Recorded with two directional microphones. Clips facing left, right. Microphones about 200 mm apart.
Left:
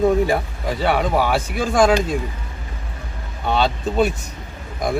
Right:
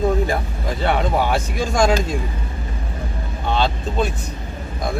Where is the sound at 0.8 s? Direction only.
10° left (ahead or behind).